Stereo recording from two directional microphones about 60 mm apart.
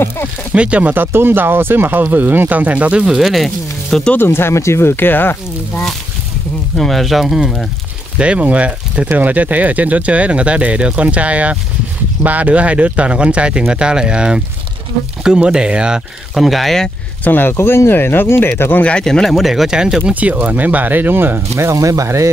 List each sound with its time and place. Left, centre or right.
0.5 s speech: right
3.2 s speech: centre
4.2 s speech: left
6.8 s speech: centre
8.2 s speech: right
16.3 s speech: centre
17.2 s speech: left
18.8 s speech: left
19.0 s speech: centre
20.2 s speech: right
21.5 s speech: right